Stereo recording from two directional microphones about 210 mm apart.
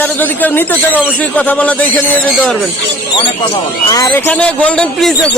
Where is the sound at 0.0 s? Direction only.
10° left (ahead or behind).